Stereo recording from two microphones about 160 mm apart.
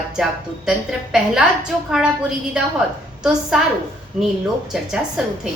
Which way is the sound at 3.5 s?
Centre (ahead or behind).